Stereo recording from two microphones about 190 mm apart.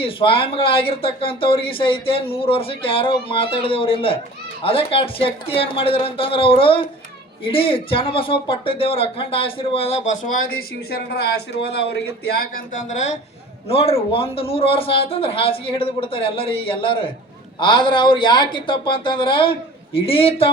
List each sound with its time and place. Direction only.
0.0 s speech: 30° left (ahead or behind)